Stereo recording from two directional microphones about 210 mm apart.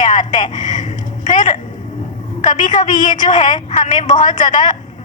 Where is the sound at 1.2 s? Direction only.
35° left (ahead or behind).